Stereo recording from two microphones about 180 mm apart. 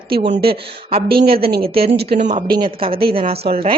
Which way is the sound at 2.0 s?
60° right (ahead or behind).